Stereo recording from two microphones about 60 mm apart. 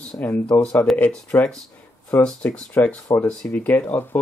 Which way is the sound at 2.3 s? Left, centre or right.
Centre.